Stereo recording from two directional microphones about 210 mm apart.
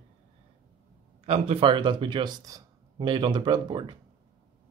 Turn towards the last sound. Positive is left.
turn(degrees=-20)  # may be behind; listen again after turning